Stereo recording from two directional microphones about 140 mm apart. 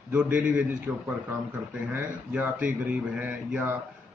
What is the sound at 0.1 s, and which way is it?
Speech, 10° right (ahead or behind).